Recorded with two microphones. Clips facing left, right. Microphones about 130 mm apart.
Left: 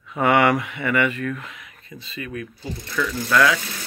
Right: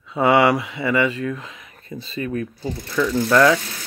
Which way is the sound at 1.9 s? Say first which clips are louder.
Right 7 dB; 35° right (ahead or behind).